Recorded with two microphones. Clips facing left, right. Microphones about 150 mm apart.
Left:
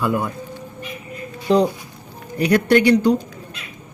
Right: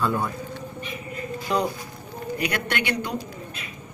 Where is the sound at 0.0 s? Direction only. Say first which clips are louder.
Left 4 dB; 10° left (ahead or behind).